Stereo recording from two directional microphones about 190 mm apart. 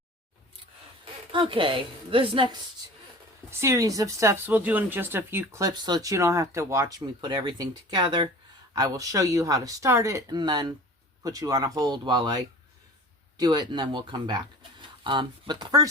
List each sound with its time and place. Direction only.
1.3 s speech: 25° right (ahead or behind)
3.6 s speech: 15° right (ahead or behind)